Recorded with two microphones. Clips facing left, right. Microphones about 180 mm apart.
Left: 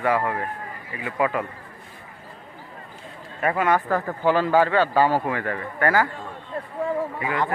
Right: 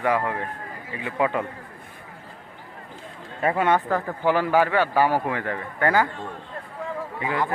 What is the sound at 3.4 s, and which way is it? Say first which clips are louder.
Speech: even; 25° right (ahead or behind).